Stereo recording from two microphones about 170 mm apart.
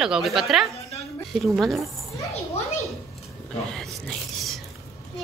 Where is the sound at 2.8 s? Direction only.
Centre (ahead or behind).